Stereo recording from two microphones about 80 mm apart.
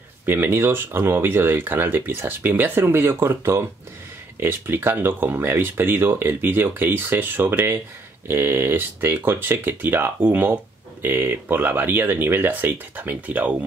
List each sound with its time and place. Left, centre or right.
0.2 s speech: right